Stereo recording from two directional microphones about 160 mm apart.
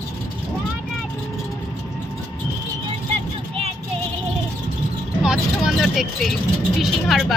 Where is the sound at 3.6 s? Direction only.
35° right (ahead or behind).